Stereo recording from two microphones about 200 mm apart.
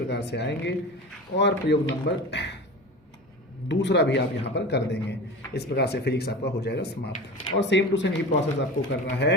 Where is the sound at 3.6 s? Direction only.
60° left (ahead or behind).